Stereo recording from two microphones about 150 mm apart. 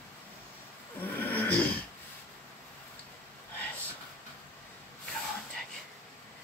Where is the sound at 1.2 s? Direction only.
10° left (ahead or behind).